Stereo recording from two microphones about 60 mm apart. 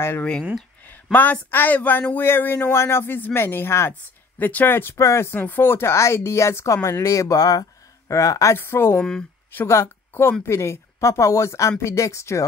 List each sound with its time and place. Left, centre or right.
0.2 s speech: centre
1.1 s speech: left
2.7 s speech: left
4.4 s speech: left
4.9 s speech: left
5.3 s speech: left
8.1 s speech: left
8.5 s a woman's voice: left